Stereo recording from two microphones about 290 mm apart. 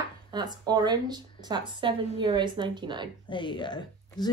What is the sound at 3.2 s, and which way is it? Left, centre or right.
Speech, centre.